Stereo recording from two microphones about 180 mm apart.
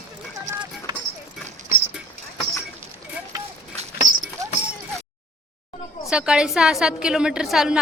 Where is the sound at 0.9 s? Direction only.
25° right (ahead or behind).